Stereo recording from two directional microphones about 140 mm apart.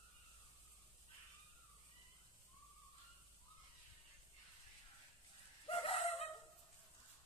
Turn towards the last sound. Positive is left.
turn(degrees=45)  # may be behind; listen again after turning